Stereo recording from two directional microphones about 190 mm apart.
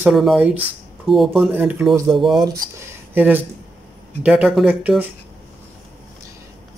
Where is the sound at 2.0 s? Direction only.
25° right (ahead or behind).